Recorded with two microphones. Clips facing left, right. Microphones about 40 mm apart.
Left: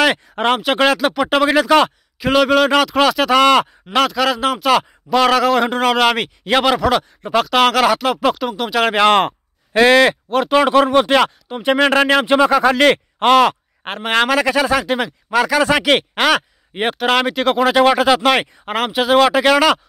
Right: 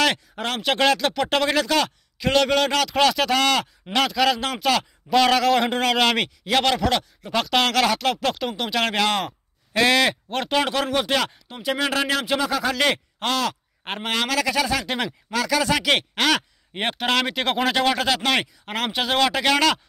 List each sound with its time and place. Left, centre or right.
0.6 s speech: centre
2.1 s speech: centre
4.0 s a man's voice: centre
9.1 s a sound: left
9.8 s speech: left
10.3 s a man's voice: centre
10.6 s speech: left
11.6 s speech: left
14.8 s speech: centre
15.5 s a man's voice: left; by 17.7 s centre
17.7 s a man's voice: centre